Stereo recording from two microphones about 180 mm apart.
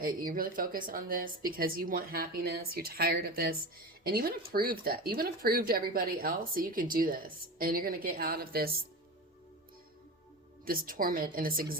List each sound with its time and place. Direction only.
0.0 s speech: 55° right (ahead or behind)
10.7 s speech: 50° right (ahead or behind)